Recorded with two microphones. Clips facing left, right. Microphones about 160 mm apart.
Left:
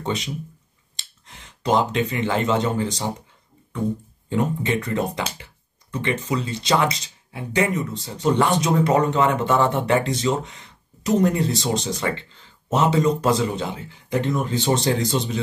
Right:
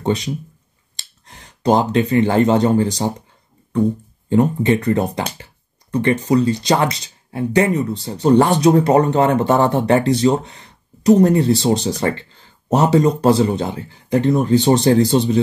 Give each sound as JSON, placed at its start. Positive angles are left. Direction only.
{"t": 0.0, "sound": "speech", "side_deg": -35}
{"t": 4.3, "sound": "speech", "side_deg": -35}